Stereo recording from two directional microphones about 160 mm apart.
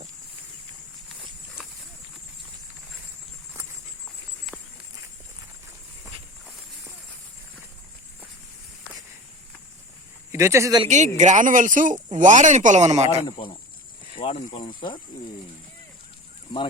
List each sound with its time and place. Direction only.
1.0 s walk: centre (ahead or behind)
10.3 s speech: 15° right (ahead or behind)
10.8 s speech: 50° right (ahead or behind)
13.2 s speech: 30° left (ahead or behind)